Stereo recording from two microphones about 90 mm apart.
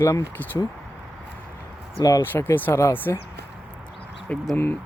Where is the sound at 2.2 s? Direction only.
25° left (ahead or behind).